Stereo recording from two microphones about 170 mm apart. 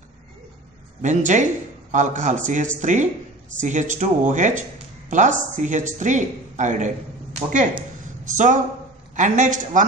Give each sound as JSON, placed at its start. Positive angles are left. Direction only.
{"t": 1.0, "sound": "a man's voice", "side_deg": -45}